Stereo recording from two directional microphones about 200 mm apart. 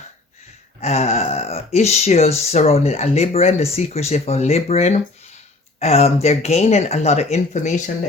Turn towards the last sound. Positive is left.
turn(degrees=35)  # may be behind; listen again after turning